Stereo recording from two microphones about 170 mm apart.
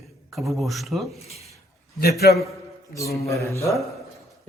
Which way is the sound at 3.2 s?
20° left (ahead or behind).